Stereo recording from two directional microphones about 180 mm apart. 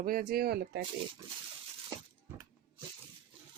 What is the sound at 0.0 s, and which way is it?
Speech, 55° right (ahead or behind).